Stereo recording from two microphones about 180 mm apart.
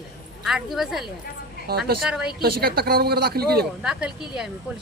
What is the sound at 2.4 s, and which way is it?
Speech, 55° right (ahead or behind).